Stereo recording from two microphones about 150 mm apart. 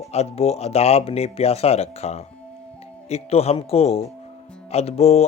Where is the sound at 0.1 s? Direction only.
45° left (ahead or behind).